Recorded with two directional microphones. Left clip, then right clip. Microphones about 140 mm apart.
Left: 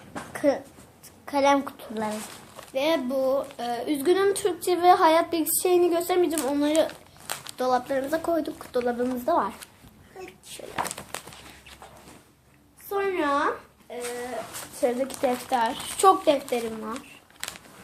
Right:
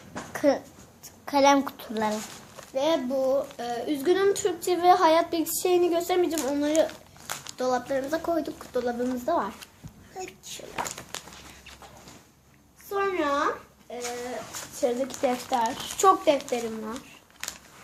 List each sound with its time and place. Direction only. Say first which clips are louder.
0.3 s a sound: even; 30° right (ahead or behind)
1.2 s a child's voice: right 1 dB; 35° right (ahead or behind)
2.7 s a woman's voice: left 1 dB; 15° left (ahead or behind)
10.2 s a sound: right 4 dB; 35° right (ahead or behind)
10.8 s walk: left 3 dB; 15° left (ahead or behind)
12.9 s a woman's voice: left 1 dB; 10° left (ahead or behind)
15.2 s speech: left 1 dB; centre (ahead or behind)
15.5 s a woman's voice: left 1 dB; 15° left (ahead or behind)